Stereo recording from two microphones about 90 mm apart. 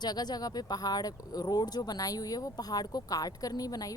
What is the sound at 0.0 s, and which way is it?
Speech, 50° left (ahead or behind).